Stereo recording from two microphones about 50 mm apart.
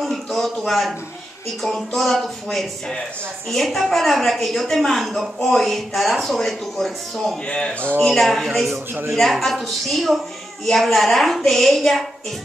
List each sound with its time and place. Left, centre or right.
0.0 s a sound: centre
1.9 s speech: centre
3.4 s speech: centre
7.4 s speech: left
8.0 s speech: centre